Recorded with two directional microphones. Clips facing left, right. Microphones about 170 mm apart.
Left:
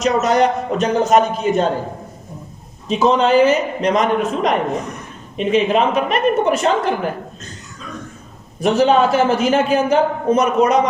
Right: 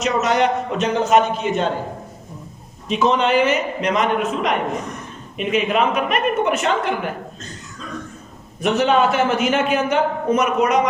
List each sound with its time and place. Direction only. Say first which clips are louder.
0.0 s a man's voice: left 3 dB; 40° left (ahead or behind)
2.9 s a man's voice: left 3 dB; 35° left (ahead or behind)
8.6 s a man's voice: left 3 dB; 35° left (ahead or behind)